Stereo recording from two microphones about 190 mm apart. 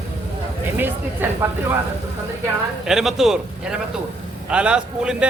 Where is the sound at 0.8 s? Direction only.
10° right (ahead or behind).